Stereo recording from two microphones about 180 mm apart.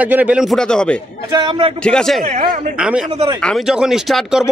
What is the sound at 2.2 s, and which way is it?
Speech, 40° right (ahead or behind).